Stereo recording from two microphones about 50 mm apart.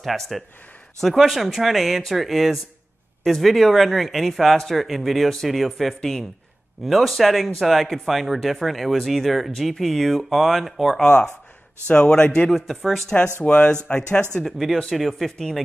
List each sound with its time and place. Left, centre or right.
0.0 s speech: centre
11.9 s speech: centre
12.4 s speech: centre
13.4 s speech: left
14.4 s speech: centre